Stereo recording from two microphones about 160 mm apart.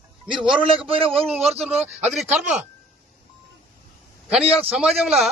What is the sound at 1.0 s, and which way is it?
Speech, 35° right (ahead or behind).